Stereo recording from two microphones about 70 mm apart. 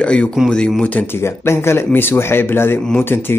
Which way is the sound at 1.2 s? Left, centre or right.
Left.